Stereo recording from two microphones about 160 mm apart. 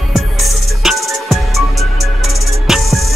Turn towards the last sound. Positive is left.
turn(degrees=0)  # may be behind; listen again after turning